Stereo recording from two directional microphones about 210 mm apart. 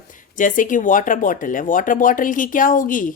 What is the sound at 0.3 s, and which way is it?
Speech, 40° left (ahead or behind).